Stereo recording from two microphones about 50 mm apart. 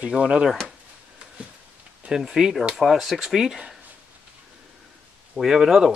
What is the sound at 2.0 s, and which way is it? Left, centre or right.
Speech, centre.